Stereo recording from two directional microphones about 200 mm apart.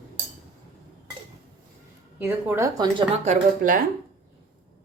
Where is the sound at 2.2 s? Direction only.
10° right (ahead or behind); by 3.8 s 40° right (ahead or behind).